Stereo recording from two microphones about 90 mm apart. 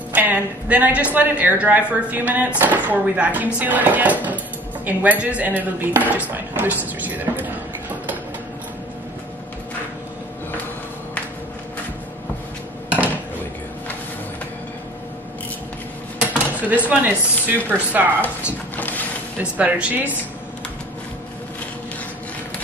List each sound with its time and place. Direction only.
0.1 s a woman's voice: 15° right (ahead or behind)
16.2 s speech: 15° right (ahead or behind)
18.8 s mechanisms: 20° left (ahead or behind)
19.5 s a woman's voice: 15° right (ahead or behind)